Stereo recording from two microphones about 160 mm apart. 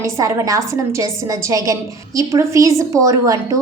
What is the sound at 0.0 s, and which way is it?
A woman's voice, 20° right (ahead or behind).